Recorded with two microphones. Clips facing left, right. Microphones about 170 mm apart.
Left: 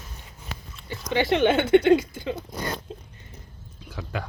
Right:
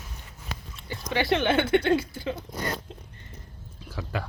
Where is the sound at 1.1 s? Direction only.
20° left (ahead or behind).